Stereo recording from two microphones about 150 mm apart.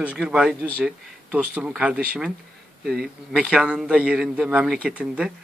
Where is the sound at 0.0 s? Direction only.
5° right (ahead or behind).